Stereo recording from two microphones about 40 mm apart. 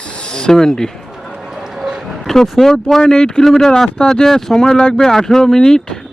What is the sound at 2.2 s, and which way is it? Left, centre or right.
Speech, centre.